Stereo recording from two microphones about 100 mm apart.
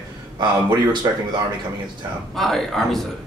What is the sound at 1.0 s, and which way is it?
Speech, 40° right (ahead or behind).